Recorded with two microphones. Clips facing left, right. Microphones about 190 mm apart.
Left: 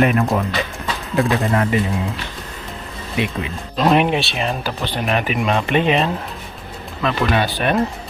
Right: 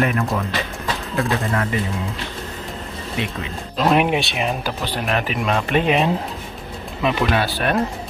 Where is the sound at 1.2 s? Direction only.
15° left (ahead or behind).